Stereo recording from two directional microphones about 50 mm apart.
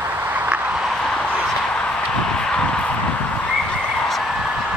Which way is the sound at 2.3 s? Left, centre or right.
Centre.